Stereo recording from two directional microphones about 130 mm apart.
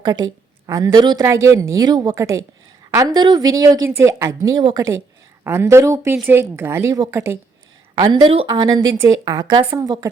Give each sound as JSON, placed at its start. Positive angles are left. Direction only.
{"t": 0.0, "sound": "a woman's voice", "side_deg": -30}
{"t": 1.2, "sound": "a woman's voice", "side_deg": -20}
{"t": 8.0, "sound": "speech", "side_deg": -35}
{"t": 8.5, "sound": "speech", "side_deg": -30}